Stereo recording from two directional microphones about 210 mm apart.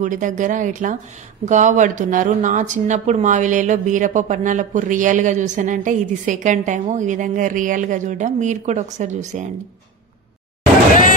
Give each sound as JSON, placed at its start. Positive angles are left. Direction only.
{"t": 0.0, "sound": "speech", "side_deg": -35}